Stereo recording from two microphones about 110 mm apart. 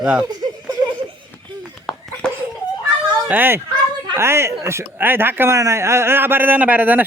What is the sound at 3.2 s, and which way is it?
Speech, 15° right (ahead or behind).